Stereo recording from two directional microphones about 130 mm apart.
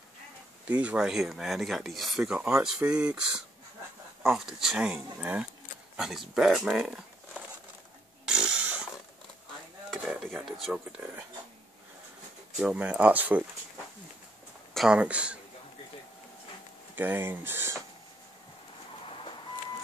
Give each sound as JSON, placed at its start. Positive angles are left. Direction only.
{"t": 0.7, "sound": "speech", "side_deg": -10}
{"t": 8.3, "sound": "a sound", "side_deg": -5}
{"t": 10.2, "sound": "a sound", "side_deg": 0}
{"t": 12.5, "sound": "speech", "side_deg": -5}
{"t": 14.7, "sound": "speech", "side_deg": -5}
{"t": 16.9, "sound": "speech", "side_deg": -15}